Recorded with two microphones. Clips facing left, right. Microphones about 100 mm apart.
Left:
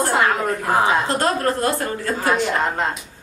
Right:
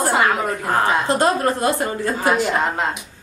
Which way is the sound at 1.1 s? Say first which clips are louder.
Right 2 dB; 15° right (ahead or behind).